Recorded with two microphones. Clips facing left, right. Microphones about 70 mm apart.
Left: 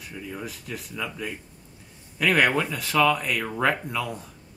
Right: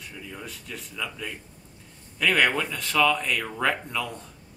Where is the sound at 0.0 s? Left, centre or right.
Centre.